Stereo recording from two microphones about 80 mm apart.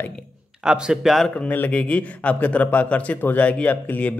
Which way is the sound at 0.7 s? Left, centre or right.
Centre.